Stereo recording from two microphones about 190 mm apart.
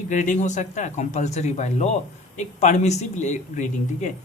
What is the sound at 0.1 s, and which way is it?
Speech, 40° left (ahead or behind).